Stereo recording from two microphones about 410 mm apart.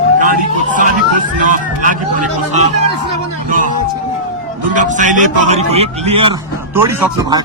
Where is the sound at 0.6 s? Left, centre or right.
Centre.